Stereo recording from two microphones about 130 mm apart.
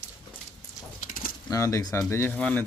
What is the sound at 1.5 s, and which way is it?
Speech, 25° left (ahead or behind).